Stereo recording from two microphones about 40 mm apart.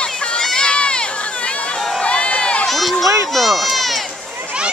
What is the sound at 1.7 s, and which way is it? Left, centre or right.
Run, centre.